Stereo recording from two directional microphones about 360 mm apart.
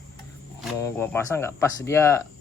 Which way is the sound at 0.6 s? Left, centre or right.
Centre.